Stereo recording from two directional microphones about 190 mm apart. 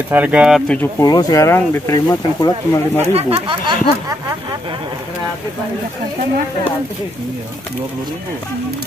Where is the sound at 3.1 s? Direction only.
30° right (ahead or behind).